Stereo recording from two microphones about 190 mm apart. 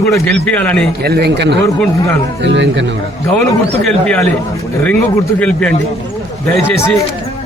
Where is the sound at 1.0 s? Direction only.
55° right (ahead or behind).